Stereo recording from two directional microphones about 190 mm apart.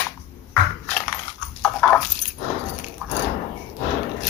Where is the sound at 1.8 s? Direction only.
Centre (ahead or behind).